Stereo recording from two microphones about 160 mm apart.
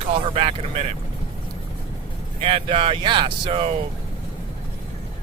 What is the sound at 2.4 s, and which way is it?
Speech, 35° right (ahead or behind).